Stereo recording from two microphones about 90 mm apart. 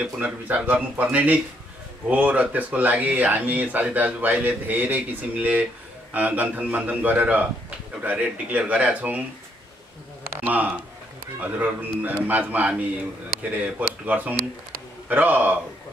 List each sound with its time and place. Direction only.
0.0 s speech: 15° right (ahead or behind)
10.3 s a sound: 20° right (ahead or behind)
11.3 s a man's voice: 20° right (ahead or behind)